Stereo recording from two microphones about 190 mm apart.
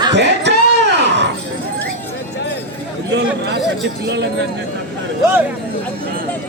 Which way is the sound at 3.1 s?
65° right (ahead or behind).